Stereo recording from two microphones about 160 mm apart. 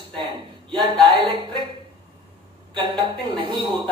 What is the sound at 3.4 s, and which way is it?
Speech, 30° right (ahead or behind).